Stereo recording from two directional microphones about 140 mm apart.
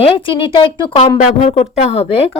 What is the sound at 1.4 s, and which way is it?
Speech, 50° left (ahead or behind).